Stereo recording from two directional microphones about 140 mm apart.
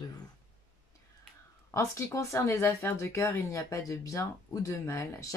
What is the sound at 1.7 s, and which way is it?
Speech, 20° left (ahead or behind).